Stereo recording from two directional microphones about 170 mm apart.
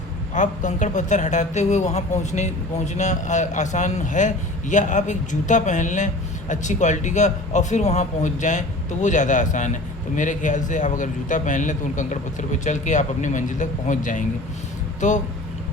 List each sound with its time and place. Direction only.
0.3 s a man's voice: 45° left (ahead or behind)